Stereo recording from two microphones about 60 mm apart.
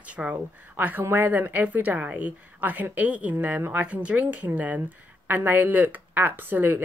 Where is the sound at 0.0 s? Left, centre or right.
Right.